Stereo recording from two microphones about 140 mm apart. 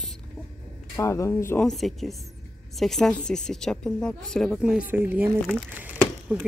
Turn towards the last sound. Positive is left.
turn(degrees=-10)  # may be behind; listen again after turning